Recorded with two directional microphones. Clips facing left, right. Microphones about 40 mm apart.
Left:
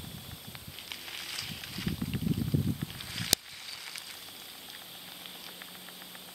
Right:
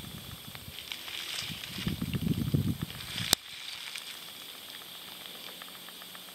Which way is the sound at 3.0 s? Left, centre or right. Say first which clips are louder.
Right 2 dB; centre.